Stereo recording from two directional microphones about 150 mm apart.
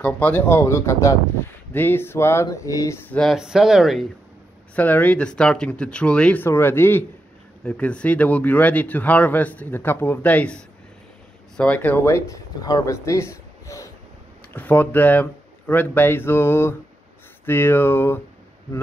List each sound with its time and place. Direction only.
0.0 s a man's voice: 10° left (ahead or behind)
3.1 s speech: centre (ahead or behind)
4.7 s a man's voice: 10° left (ahead or behind)